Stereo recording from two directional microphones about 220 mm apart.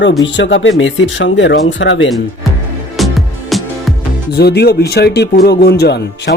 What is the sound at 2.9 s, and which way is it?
Music, centre (ahead or behind).